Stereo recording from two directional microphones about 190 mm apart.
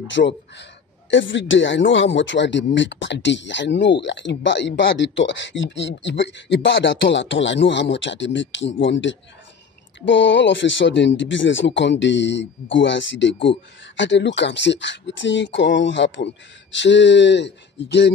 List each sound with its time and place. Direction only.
0.1 s speech: 65° left (ahead or behind)